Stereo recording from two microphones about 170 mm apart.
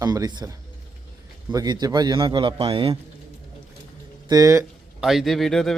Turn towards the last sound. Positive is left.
turn(degrees=5)  # may be behind; listen again after turning